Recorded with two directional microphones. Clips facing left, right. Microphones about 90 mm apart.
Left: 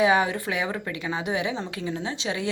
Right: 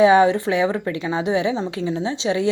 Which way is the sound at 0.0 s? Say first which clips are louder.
Right 8 dB; 30° right (ahead or behind).